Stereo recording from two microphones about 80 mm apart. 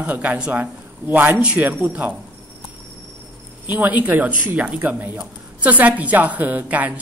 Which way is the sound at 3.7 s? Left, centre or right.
Right.